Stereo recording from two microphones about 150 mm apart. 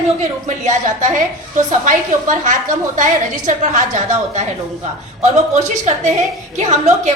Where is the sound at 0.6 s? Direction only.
55° right (ahead or behind).